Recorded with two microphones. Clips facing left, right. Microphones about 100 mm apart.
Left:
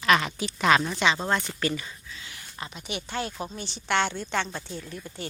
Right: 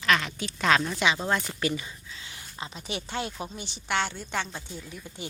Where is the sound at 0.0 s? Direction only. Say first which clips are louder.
Left 3 dB; 15° left (ahead or behind).